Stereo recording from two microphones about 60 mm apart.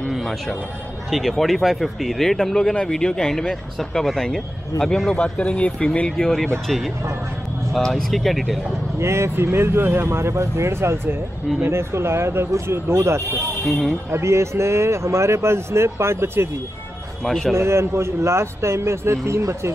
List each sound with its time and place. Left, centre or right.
0.1 s a sound: centre
1.1 s speech: centre
5.1 s speech: centre
7.7 s speech: centre
9.0 s a man's voice: right
13.7 s speech: centre
14.1 s a man's voice: right
17.2 s speech: centre
17.6 s a man's voice: right